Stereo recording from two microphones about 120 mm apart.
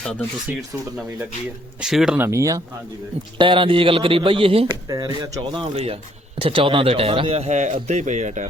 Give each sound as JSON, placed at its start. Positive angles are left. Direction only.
{"t": 0.0, "sound": "speech", "side_deg": 5}
{"t": 1.8, "sound": "speech", "side_deg": -5}
{"t": 2.1, "sound": "speech", "side_deg": -20}
{"t": 3.3, "sound": "a man's voice", "side_deg": -45}
{"t": 4.7, "sound": "speech", "side_deg": -35}
{"t": 5.7, "sound": "speech", "side_deg": -55}